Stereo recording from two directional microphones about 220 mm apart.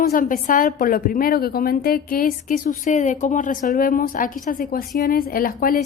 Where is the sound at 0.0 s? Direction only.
40° left (ahead or behind).